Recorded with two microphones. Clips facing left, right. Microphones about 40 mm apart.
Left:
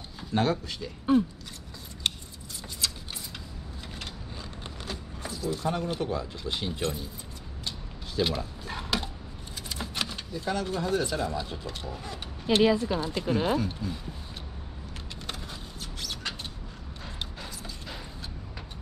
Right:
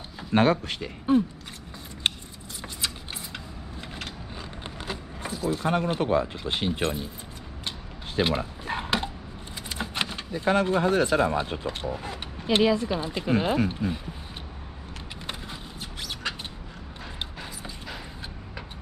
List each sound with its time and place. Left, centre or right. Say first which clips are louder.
0.3 s speech: right 5 dB; right
2.0 s keys jangling: right 3 dB; right
4.6 s power windows: right 4 dB; right
5.7 s speech: right 6 dB; right
8.2 s a sound: right 3 dB; right
9.7 s keys jangling: right 3 dB; right
10.3 s speech: right 9 dB; right
16.0 s a sound: right 3 dB; right